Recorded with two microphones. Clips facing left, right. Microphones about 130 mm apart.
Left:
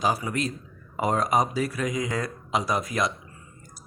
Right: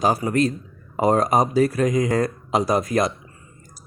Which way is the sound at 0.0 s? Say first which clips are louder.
Right 7 dB; 40° right (ahead or behind).